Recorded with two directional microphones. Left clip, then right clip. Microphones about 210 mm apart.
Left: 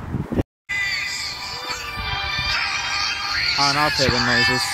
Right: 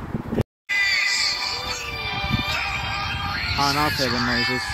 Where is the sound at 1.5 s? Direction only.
10° left (ahead or behind).